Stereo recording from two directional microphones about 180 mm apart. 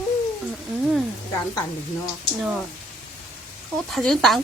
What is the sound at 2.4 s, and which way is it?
Speech, centre (ahead or behind).